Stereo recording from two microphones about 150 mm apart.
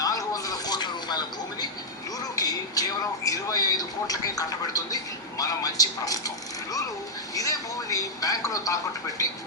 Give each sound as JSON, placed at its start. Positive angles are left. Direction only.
{"t": 0.0, "sound": "vehicle", "side_deg": 25}
{"t": 2.3, "sound": "a sound", "side_deg": 25}
{"t": 3.2, "sound": "speech", "side_deg": 25}